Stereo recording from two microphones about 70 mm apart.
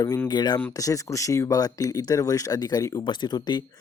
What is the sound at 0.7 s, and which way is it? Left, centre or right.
Speech, left.